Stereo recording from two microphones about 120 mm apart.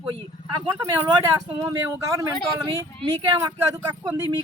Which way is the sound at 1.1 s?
30° right (ahead or behind).